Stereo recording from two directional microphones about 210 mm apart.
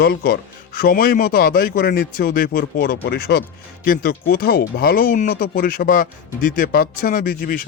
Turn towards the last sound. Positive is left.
turn(degrees=45)  # may be behind; listen again after turning